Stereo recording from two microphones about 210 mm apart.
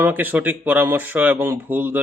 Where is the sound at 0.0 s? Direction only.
10° right (ahead or behind).